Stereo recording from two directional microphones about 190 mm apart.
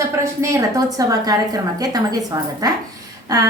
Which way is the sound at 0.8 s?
20° right (ahead or behind).